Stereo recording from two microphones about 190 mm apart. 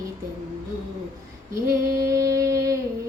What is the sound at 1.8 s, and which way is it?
Music, 50° right (ahead or behind).